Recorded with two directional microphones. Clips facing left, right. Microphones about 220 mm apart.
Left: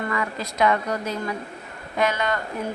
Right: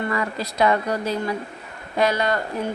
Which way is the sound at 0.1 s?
35° right (ahead or behind).